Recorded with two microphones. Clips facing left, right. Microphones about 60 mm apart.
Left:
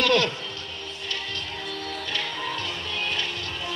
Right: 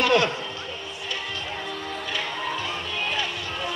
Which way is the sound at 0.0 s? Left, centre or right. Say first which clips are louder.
Right 1 dB; centre.